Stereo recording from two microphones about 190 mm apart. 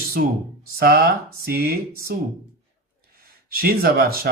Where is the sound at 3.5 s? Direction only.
55° right (ahead or behind).